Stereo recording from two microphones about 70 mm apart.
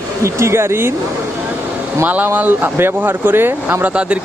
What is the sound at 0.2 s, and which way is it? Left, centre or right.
Speech, right.